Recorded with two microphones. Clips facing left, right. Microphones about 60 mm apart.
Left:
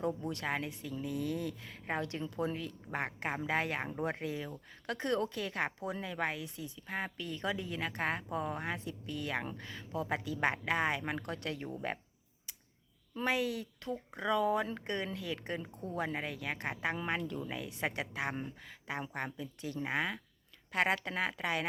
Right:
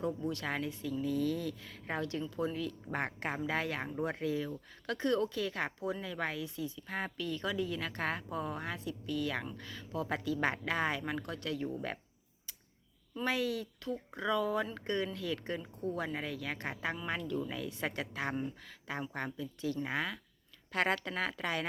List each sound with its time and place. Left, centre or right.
0.0 s a woman's voice: left
2.9 s speech: centre
3.2 s a woman's voice: centre
13.1 s a woman's voice: left